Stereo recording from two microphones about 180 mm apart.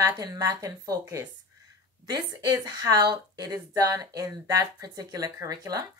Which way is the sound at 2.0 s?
20° right (ahead or behind).